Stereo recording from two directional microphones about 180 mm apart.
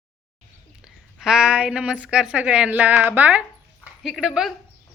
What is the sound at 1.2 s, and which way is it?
Speech, 5° right (ahead or behind).